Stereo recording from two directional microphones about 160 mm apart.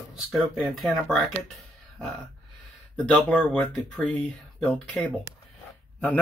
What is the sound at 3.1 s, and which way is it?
Speech, 10° left (ahead or behind).